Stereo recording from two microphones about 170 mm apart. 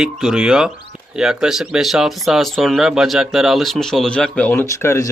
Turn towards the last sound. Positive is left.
turn(degrees=15)  # may be behind; listen again after turning